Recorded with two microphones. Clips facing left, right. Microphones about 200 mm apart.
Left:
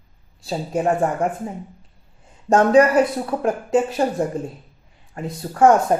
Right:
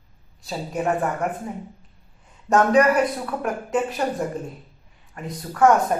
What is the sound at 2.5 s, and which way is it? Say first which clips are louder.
Speech: left 3 dB; 25° left (ahead or behind).